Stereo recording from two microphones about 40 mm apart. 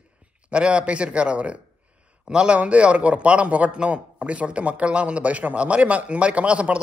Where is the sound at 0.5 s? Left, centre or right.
Right.